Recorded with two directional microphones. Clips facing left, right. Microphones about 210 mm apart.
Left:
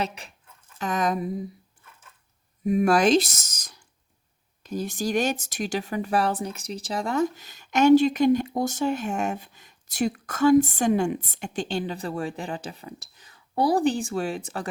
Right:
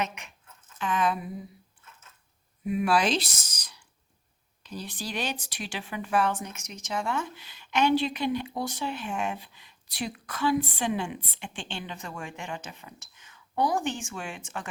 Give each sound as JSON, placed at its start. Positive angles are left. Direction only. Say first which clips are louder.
{"t": 0.0, "sound": "speech", "louder": "left 3 dB", "side_deg": 35}
{"t": 2.6, "sound": "speech", "louder": "left 6 dB", "side_deg": 45}